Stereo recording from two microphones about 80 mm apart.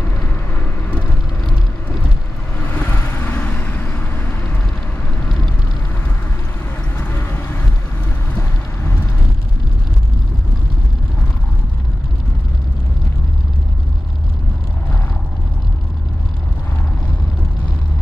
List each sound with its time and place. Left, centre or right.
0.6 s vehicle: centre
2.7 s vehicle: left
7.0 s vehicle: left